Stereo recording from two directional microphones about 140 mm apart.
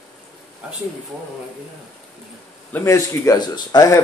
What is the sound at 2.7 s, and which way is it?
Speech, 20° left (ahead or behind).